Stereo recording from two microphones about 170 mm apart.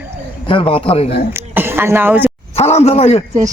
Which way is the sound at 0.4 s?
30° left (ahead or behind).